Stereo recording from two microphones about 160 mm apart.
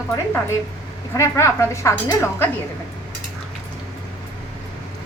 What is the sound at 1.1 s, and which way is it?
A woman's voice, 15° left (ahead or behind).